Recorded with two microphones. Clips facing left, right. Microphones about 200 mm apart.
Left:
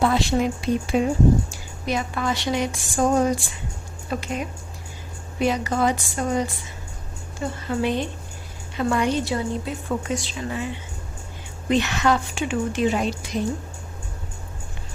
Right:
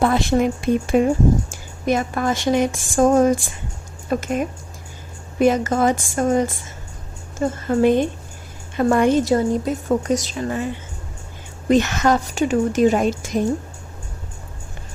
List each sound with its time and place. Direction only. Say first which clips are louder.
0.0 s a woman's voice: right 3 dB; 50° right (ahead or behind)
11.7 s a woman's voice: right 4 dB; 45° right (ahead or behind)